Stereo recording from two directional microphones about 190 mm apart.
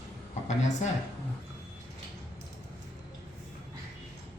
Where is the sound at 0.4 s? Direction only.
40° left (ahead or behind).